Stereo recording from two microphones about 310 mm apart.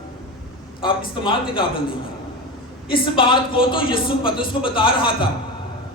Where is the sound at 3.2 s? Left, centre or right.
Centre.